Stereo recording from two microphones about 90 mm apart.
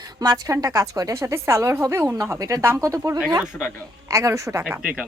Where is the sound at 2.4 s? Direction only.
35° right (ahead or behind).